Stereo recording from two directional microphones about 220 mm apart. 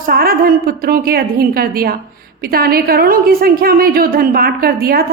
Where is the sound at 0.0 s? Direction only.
45° right (ahead or behind).